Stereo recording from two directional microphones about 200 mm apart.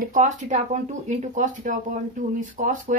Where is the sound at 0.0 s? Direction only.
40° right (ahead or behind).